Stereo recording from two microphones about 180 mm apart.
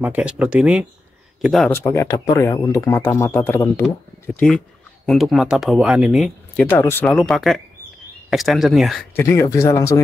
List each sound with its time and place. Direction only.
0.0 s speech: 5° right (ahead or behind)
1.7 s speech: 15° left (ahead or behind)
9.1 s speech: 15° left (ahead or behind)